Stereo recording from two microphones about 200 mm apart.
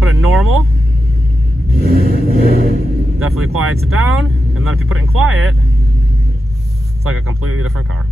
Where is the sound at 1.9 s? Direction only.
50° right (ahead or behind).